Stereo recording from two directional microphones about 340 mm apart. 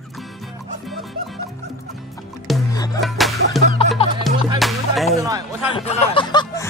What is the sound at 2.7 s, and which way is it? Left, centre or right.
Music, centre.